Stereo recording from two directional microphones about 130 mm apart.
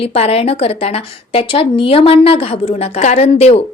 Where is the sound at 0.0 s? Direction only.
50° left (ahead or behind).